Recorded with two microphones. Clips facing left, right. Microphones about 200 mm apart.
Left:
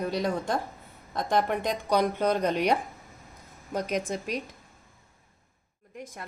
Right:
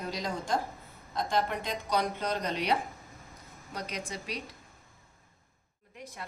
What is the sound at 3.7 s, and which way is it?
Speech, 50° left (ahead or behind).